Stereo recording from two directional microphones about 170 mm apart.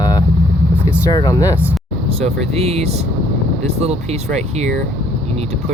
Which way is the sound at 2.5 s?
40° right (ahead or behind).